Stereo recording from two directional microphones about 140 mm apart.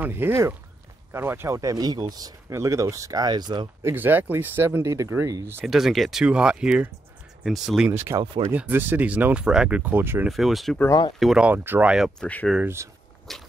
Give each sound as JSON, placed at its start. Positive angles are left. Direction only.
{"t": 0.0, "sound": "speech", "side_deg": -15}
{"t": 3.9, "sound": "speech", "side_deg": -15}
{"t": 5.7, "sound": "speech", "side_deg": 0}
{"t": 10.2, "sound": "speech", "side_deg": 0}
{"t": 12.2, "sound": "speech", "side_deg": 10}
{"t": 12.6, "sound": "speech", "side_deg": -20}
{"t": 13.3, "sound": "whip", "side_deg": 0}